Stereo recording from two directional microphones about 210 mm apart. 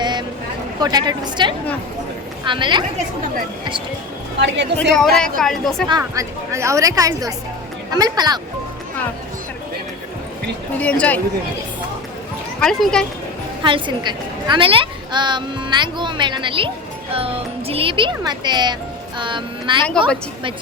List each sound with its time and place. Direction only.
0.0 s a sound: 20° right (ahead or behind)
0.8 s a woman's voice: 20° right (ahead or behind)
4.4 s a woman's voice: 55° right (ahead or behind)
4.9 s a woman's voice: centre (ahead or behind)
5.9 s a woman's voice: 15° right (ahead or behind)
10.8 s speech: 5° left (ahead or behind)
12.5 s speech: 5° left (ahead or behind)
13.7 s a woman's voice: 25° right (ahead or behind)